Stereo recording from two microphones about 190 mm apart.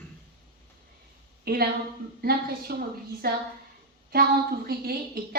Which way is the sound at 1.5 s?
55° right (ahead or behind).